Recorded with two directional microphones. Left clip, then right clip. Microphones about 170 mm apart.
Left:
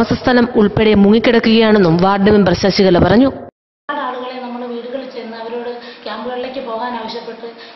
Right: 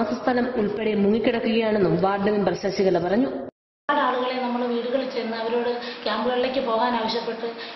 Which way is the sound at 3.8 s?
Centre (ahead or behind).